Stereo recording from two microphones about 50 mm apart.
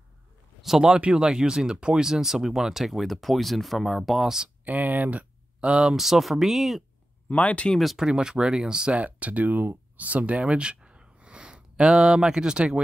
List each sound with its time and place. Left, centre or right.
0.6 s speech: centre
4.6 s speech: right; by 5.9 s centre
5.9 s speech: centre
7.2 s speech: left
7.8 s speech: centre
8.1 s speech: centre
9.0 s speech: right